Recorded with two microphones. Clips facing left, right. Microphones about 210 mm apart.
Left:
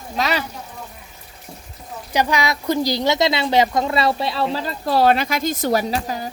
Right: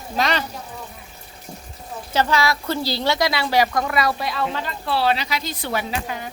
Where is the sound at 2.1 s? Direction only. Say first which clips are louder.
Even; 15° left (ahead or behind); by 6.3 s 35° left (ahead or behind).